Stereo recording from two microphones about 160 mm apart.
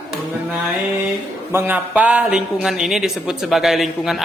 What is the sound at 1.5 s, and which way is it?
A man's voice, 15° right (ahead or behind).